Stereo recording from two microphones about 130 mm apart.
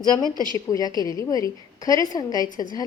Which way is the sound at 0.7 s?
30° left (ahead or behind).